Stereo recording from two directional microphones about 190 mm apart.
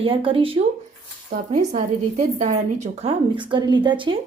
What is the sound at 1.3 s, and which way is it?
A woman's voice, 45° right (ahead or behind).